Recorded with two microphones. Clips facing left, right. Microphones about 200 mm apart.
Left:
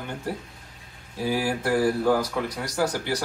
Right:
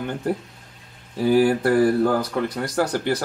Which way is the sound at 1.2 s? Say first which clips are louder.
Right 8 dB; 60° right (ahead or behind).